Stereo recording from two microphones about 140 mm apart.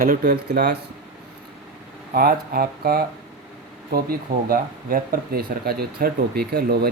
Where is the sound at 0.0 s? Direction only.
90° right.